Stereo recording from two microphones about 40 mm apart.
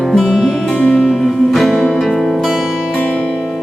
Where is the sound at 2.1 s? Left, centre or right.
Centre.